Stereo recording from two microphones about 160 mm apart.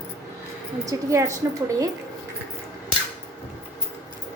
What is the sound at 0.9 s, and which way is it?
Speech, 20° right (ahead or behind).